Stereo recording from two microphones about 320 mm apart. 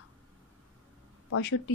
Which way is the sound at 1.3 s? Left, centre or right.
Left.